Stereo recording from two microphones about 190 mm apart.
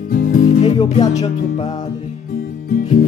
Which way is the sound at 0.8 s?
20° left (ahead or behind).